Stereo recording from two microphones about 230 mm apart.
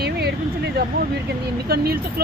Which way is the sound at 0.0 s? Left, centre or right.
Right.